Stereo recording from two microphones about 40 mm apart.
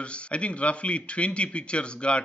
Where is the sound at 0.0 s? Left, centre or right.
Left.